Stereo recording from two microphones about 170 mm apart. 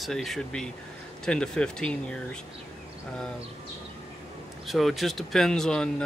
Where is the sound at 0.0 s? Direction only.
Centre (ahead or behind).